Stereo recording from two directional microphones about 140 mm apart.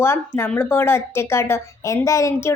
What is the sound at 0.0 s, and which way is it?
A woman's voice, 15° left (ahead or behind).